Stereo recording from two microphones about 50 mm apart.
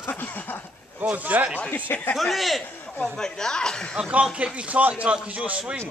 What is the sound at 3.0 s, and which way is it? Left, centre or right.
Speech, centre.